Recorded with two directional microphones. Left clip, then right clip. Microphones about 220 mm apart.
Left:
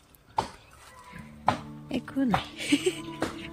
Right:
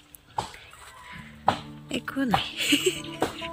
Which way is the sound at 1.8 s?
10° left (ahead or behind).